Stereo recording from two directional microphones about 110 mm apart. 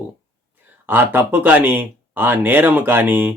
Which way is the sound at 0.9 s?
20° right (ahead or behind).